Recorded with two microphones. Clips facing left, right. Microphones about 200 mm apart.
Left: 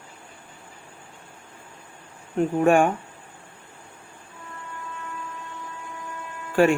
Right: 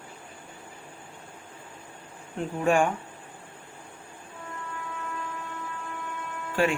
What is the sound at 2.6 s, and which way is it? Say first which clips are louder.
Speech: left 4 dB; 60° left (ahead or behind).